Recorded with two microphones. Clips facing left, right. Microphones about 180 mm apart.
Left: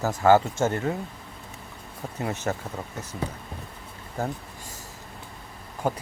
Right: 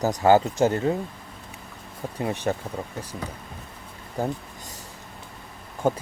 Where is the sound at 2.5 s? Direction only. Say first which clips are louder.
Right 3 dB; 20° right (ahead or behind).